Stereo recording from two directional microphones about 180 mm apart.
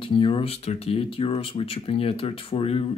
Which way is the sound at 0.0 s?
30° left (ahead or behind).